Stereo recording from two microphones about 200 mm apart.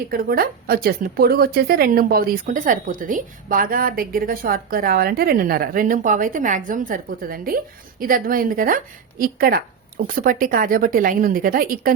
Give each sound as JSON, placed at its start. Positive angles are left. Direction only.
{"t": 0.1, "sound": "a woman's voice", "side_deg": -50}